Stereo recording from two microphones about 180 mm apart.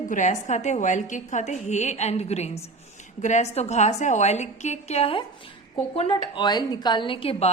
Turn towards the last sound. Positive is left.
turn(degrees=30)  # may be behind; listen again after turning